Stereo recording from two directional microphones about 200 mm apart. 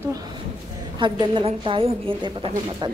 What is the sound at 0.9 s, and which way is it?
A woman's voice, 25° right (ahead or behind).